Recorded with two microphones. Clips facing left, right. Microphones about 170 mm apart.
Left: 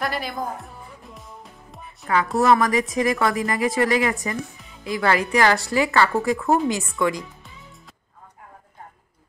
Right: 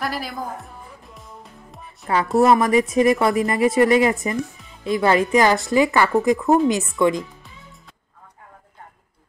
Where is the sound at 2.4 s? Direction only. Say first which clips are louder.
Right 3 dB; 25° right (ahead or behind).